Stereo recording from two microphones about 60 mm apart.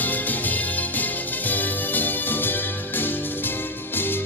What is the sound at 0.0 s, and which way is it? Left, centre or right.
Music, left.